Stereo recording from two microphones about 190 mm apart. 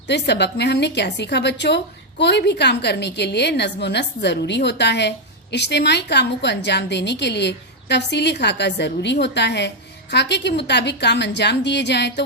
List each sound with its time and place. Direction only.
0.1 s a woman's voice: 65° left (ahead or behind)